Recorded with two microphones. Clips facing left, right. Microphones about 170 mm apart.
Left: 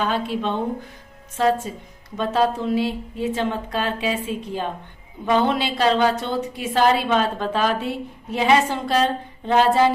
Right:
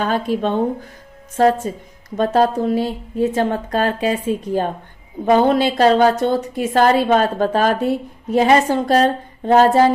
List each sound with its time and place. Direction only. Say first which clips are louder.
0.0 s a woman's voice: right 4 dB; 45° right (ahead or behind)